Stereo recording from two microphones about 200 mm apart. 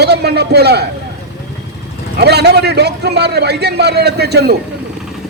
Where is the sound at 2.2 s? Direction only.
55° right (ahead or behind).